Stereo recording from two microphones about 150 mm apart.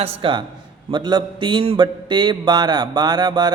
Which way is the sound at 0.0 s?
40° right (ahead or behind).